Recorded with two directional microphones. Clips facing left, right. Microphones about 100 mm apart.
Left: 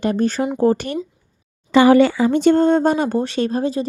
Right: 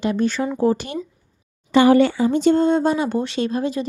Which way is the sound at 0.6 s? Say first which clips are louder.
Left 3 dB; 50° left (ahead or behind).